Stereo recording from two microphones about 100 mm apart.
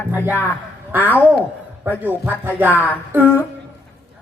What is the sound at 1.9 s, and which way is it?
A woman's voice, 20° right (ahead or behind).